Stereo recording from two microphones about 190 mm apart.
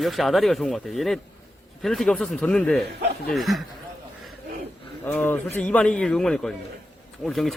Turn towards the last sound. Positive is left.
turn(degrees=0)  # may be behind; listen again after turning